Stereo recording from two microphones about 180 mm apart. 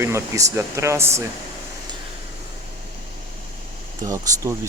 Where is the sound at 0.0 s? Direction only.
15° right (ahead or behind).